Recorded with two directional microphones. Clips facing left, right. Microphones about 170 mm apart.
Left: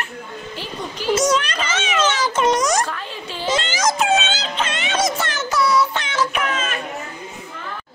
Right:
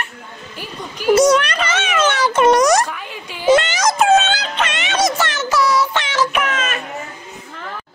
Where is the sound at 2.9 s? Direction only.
10° right (ahead or behind).